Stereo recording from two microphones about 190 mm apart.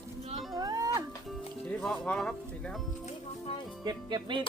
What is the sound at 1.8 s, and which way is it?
Music, 5° left (ahead or behind).